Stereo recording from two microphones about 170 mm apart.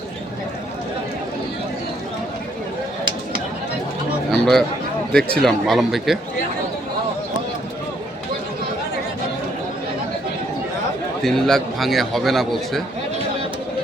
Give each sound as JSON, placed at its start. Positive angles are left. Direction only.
{"t": 4.3, "sound": "a sound", "side_deg": 0}
{"t": 5.1, "sound": "a man's voice", "side_deg": 5}
{"t": 11.2, "sound": "a man's voice", "side_deg": 0}